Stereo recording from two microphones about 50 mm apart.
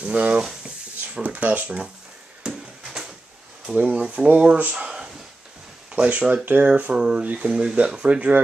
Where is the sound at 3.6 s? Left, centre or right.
Right.